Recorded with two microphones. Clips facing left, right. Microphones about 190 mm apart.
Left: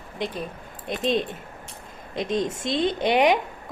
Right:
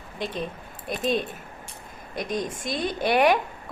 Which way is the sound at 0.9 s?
20° left (ahead or behind).